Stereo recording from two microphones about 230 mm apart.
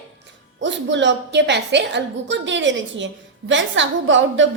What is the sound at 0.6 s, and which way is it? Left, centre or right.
A woman's voice, right.